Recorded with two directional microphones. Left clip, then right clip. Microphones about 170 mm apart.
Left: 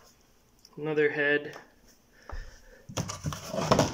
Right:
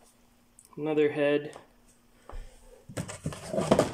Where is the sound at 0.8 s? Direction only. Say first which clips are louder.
Right 1 dB; 20° right (ahead or behind).